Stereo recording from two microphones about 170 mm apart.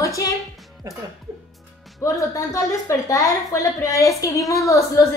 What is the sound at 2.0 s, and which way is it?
A woman's voice, 20° left (ahead or behind).